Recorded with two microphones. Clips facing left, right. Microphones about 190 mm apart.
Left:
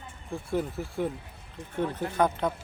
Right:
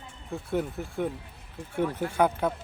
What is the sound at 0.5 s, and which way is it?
Speech, centre (ahead or behind).